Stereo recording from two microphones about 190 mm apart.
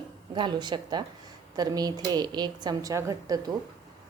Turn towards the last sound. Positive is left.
turn(degrees=-20)  # may be behind; listen again after turning